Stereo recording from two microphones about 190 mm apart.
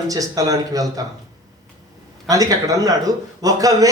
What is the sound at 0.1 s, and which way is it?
Speech, 20° right (ahead or behind).